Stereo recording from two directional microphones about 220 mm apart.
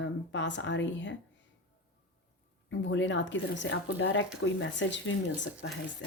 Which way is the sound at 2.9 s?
55° left (ahead or behind).